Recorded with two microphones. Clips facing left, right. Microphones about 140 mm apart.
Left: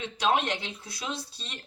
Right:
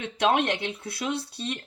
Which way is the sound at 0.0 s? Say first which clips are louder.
Right 3 dB; 60° right (ahead or behind).